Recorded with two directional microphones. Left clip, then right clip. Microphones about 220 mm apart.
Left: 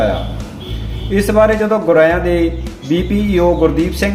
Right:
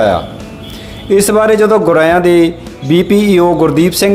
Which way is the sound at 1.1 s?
50° right (ahead or behind).